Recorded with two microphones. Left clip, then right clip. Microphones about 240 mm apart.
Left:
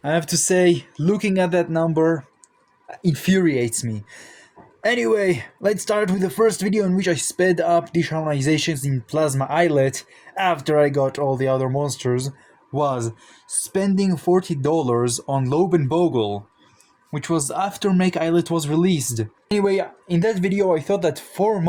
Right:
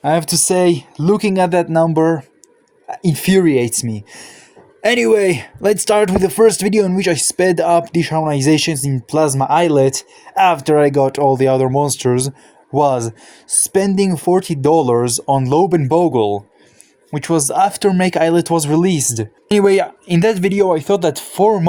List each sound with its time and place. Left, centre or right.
0.0 s speech: right